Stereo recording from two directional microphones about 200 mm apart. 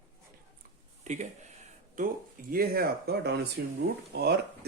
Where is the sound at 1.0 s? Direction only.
35° right (ahead or behind).